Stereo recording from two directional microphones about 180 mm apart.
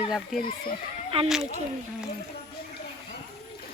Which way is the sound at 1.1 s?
35° right (ahead or behind).